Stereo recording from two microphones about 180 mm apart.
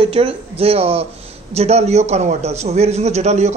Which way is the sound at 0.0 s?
30° right (ahead or behind).